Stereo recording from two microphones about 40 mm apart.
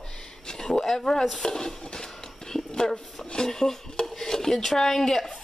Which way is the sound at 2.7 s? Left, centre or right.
Centre.